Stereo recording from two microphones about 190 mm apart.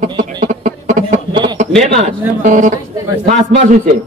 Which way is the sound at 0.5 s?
40° right (ahead or behind).